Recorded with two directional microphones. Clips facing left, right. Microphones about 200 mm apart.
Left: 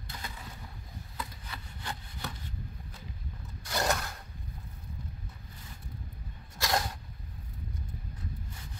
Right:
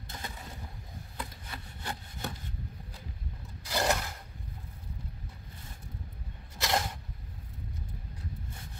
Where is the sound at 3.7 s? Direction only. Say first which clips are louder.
Right 1 dB; 5° right (ahead or behind).